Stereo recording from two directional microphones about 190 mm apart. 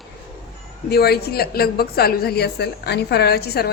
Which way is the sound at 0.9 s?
55° left (ahead or behind).